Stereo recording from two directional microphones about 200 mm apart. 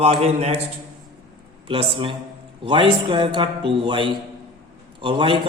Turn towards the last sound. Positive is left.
turn(degrees=-25)  # may be behind; listen again after turning